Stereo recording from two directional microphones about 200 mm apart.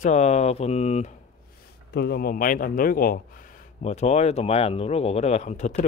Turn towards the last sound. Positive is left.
turn(degrees=35)  # may be behind; listen again after turning